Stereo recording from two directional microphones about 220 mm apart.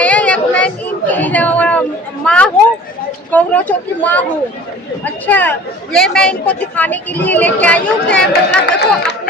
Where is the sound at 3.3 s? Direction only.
5° left (ahead or behind).